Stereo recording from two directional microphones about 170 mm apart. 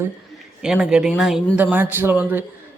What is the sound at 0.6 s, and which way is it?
Speech, 5° right (ahead or behind).